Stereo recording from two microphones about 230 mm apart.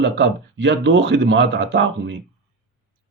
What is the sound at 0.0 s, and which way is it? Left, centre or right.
Speech, right.